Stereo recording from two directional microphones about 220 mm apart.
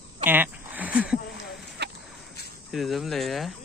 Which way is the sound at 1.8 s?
50° right (ahead or behind).